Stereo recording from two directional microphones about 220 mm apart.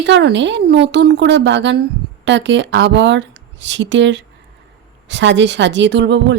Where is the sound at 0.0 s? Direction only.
50° right (ahead or behind).